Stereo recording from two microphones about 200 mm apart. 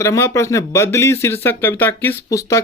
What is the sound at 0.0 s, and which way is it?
Speech, 15° left (ahead or behind).